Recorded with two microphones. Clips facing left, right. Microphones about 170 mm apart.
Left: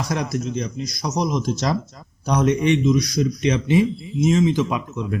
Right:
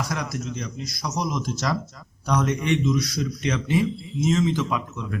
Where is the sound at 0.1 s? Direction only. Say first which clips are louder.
Left 6 dB; 20° left (ahead or behind).